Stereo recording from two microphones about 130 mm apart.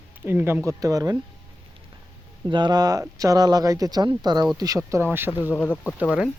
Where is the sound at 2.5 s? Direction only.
35° right (ahead or behind).